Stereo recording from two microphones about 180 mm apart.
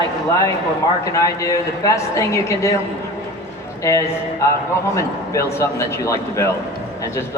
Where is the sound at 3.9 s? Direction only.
15° left (ahead or behind).